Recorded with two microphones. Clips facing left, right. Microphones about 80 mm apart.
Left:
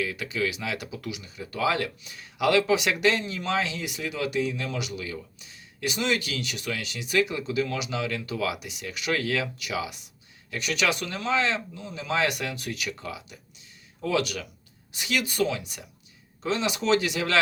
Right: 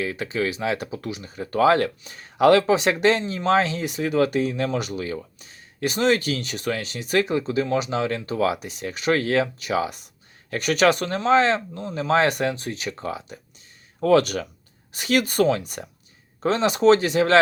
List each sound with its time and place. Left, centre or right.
0.0 s speech: right